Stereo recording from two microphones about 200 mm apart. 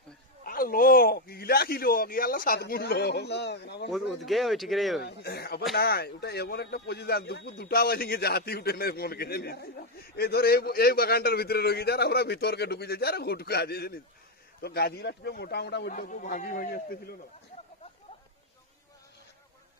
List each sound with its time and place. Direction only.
0.4 s speech: 45° left (ahead or behind)
4.3 s speech: centre (ahead or behind)
5.0 s speech: 55° left (ahead or behind)
15.9 s speech: 40° left (ahead or behind)